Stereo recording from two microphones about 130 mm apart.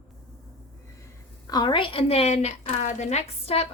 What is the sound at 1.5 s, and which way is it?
A woman's voice, 30° left (ahead or behind).